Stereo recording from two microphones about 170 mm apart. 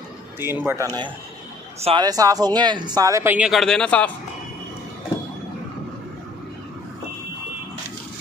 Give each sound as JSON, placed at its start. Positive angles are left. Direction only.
{"t": 0.4, "sound": "a man's voice", "side_deg": -15}